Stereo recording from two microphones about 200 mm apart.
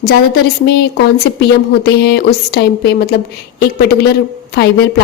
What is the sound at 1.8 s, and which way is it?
A woman's voice, 55° left (ahead or behind).